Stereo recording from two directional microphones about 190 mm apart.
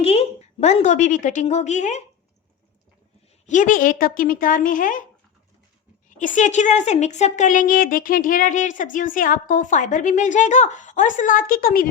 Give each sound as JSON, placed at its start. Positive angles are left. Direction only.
{"t": 0.0, "sound": "a woman's voice", "side_deg": 30}
{"t": 3.4, "sound": "speech", "side_deg": 40}
{"t": 6.1, "sound": "speech", "side_deg": 40}